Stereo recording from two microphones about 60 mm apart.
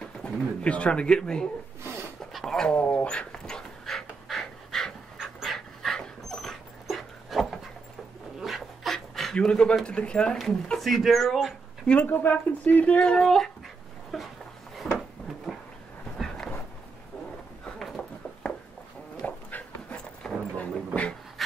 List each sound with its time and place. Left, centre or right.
0.2 s speech: left
2.3 s dog: centre
2.7 s speech: left
3.3 s pant: centre
5.2 s dog: centre
9.8 s speech: centre
10.8 s speech: centre
11.8 s speech: centre
12.1 s speech: left; by 13.5 s centre
14.1 s a sound: centre
17.7 s a sound: centre
19.2 s dog: left